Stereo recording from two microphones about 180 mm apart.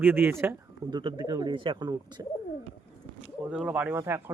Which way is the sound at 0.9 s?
25° right (ahead or behind).